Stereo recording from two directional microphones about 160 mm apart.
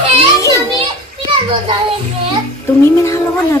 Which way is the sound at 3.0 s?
20° left (ahead or behind).